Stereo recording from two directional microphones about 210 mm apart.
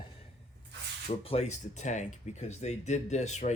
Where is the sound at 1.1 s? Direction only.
30° left (ahead or behind).